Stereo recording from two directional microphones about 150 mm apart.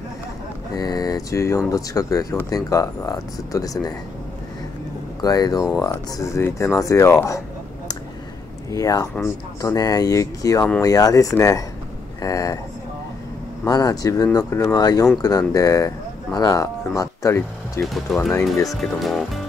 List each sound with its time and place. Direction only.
0.7 s speech: 25° left (ahead or behind)
5.2 s speech: 25° left (ahead or behind)
8.6 s speech: 20° left (ahead or behind)
13.7 s speech: 25° left (ahead or behind)
18.1 s speech: centre (ahead or behind)